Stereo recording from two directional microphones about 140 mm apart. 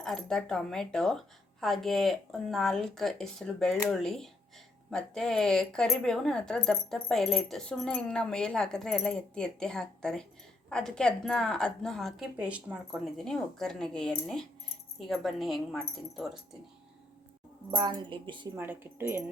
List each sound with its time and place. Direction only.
0.0 s speech: 5° left (ahead or behind)
13.1 s speech: 5° left (ahead or behind)
17.7 s speech: 30° right (ahead or behind)
18.5 s speech: 15° right (ahead or behind)